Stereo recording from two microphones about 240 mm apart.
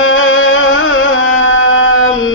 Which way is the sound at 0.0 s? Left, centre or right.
Left.